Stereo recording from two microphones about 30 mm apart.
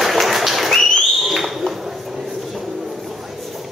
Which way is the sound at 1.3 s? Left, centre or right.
Centre.